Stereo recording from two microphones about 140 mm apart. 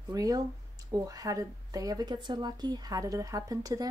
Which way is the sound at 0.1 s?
25° right (ahead or behind).